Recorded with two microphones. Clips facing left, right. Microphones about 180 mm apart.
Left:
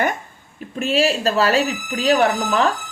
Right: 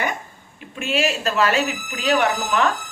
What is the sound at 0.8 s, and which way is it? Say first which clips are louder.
Speech: left 4 dB; 35° left (ahead or behind).